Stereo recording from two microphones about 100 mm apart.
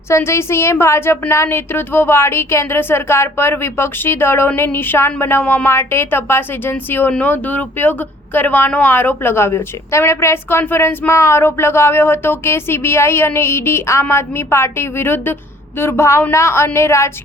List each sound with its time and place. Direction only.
0.1 s speech: 25° left (ahead or behind)